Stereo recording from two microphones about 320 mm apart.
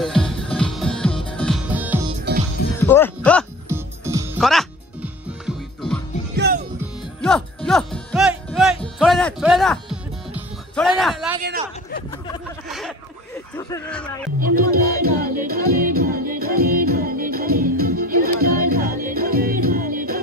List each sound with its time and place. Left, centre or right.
0.0 s music: centre
2.9 s speech: centre
3.6 s music: centre
6.3 s music: right
7.2 s music: centre
12.6 s a sound: centre
14.4 s music: right